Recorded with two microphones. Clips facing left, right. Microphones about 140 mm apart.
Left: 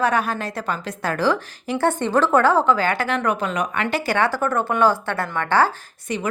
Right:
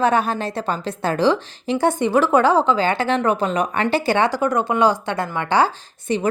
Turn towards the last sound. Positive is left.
turn(degrees=-30)  # may be behind; listen again after turning